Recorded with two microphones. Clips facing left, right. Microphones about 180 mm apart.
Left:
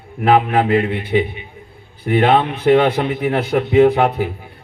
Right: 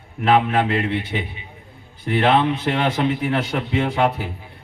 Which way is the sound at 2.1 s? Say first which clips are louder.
Left 3 dB; 50° left (ahead or behind).